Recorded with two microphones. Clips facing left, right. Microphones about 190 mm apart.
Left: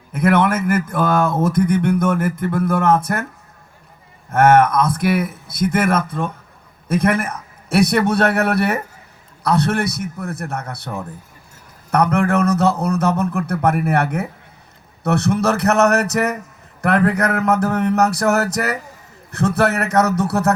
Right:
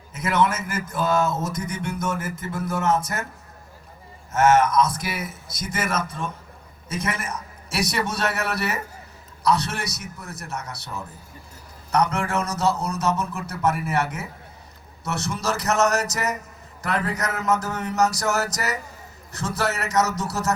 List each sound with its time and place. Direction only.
0.1 s speech: 55° left (ahead or behind)
4.3 s speech: 55° left (ahead or behind)